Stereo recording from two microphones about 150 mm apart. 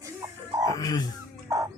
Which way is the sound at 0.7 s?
25° left (ahead or behind).